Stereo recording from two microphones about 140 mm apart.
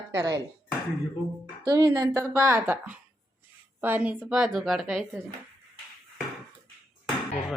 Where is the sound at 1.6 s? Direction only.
25° right (ahead or behind); by 5.0 s centre (ahead or behind).